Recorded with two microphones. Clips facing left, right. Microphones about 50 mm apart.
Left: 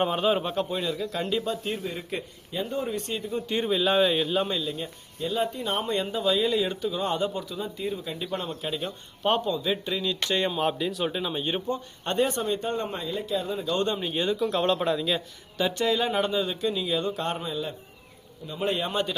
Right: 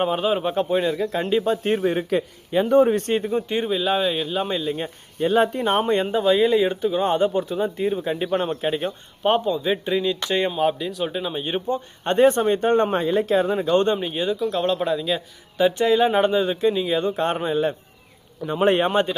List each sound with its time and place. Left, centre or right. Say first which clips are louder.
0.0 s speech: right 3 dB; centre
0.4 s speech: right 7 dB; right
1.8 s speech: right 11 dB; right
3.5 s speech: left 1 dB; centre
4.4 s speech: right 5 dB; right
5.2 s speech: right 9 dB; right
9.2 s speech: right 5 dB; centre
12.0 s speech: right 9 dB; right
14.0 s speech: right 3 dB; centre
15.5 s speech: right 7 dB; centre; by 17.7 s right
18.4 s speech: right 9 dB; right
18.9 s speech: right 8 dB; right